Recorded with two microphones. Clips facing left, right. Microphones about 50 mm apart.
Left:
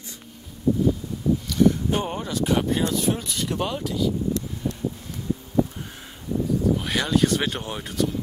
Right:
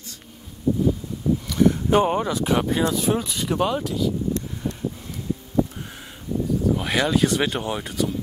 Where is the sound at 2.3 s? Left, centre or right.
Centre.